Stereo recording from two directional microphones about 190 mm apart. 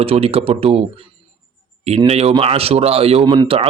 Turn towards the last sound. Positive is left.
turn(degrees=-30)  # may be behind; listen again after turning